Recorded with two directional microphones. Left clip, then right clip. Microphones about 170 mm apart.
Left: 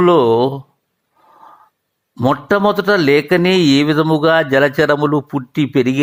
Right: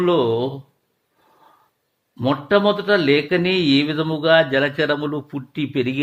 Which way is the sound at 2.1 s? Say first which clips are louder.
Left 3 dB; 35° left (ahead or behind).